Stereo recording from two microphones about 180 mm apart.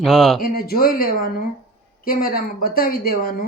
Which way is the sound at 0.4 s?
55° left (ahead or behind).